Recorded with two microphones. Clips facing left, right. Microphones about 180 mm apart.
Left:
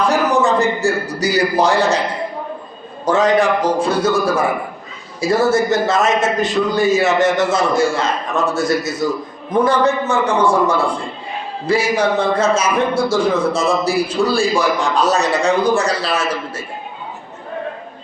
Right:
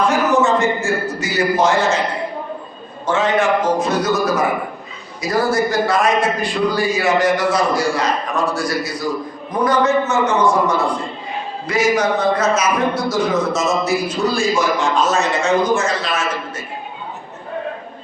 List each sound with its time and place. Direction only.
0.1 s a man's voice: 35° left (ahead or behind)
3.1 s a man's voice: 40° left (ahead or behind)